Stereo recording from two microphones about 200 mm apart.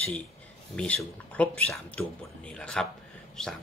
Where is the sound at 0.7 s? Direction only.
5° left (ahead or behind).